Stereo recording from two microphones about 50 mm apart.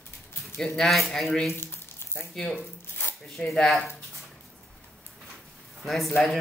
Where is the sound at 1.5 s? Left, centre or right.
Left.